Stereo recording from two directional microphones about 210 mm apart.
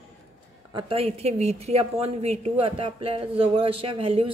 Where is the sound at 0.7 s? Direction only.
25° right (ahead or behind).